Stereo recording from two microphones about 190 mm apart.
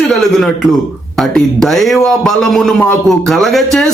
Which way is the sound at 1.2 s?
Centre (ahead or behind).